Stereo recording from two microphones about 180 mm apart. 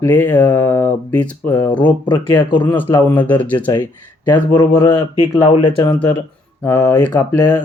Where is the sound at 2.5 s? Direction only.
25° left (ahead or behind).